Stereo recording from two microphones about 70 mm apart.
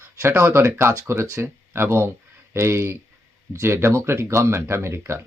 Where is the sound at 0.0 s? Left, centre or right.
Right.